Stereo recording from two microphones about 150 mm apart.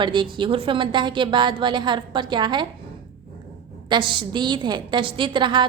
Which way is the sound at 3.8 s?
30° right (ahead or behind).